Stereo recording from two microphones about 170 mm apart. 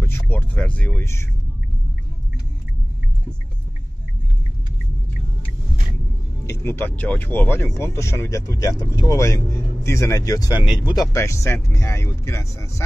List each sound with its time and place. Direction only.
0.0 s speech: 15° left (ahead or behind)
6.4 s speech: 15° left (ahead or behind)